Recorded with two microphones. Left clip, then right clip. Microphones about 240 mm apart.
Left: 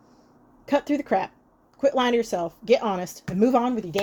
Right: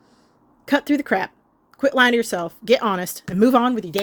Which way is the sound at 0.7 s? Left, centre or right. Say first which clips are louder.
Right 3 dB; right.